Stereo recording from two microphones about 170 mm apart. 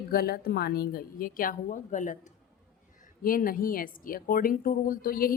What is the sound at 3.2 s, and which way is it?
A woman's voice, 55° left (ahead or behind).